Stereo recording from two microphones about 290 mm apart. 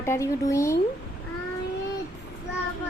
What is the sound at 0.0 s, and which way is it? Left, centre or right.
Speech, centre.